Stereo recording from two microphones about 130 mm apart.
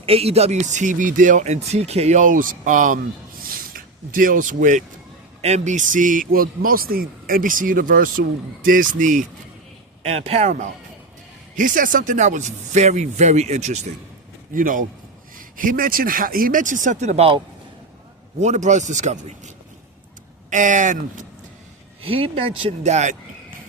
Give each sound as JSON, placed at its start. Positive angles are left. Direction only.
{"t": 0.0, "sound": "speech", "side_deg": -50}
{"t": 5.4, "sound": "speech", "side_deg": -60}
{"t": 10.1, "sound": "speech", "side_deg": -50}
{"t": 11.5, "sound": "speech", "side_deg": -90}
{"t": 14.5, "sound": "speech", "side_deg": -90}
{"t": 18.3, "sound": "speech", "side_deg": -65}
{"t": 22.0, "sound": "speech", "side_deg": -45}
{"t": 22.8, "sound": "speech", "side_deg": -60}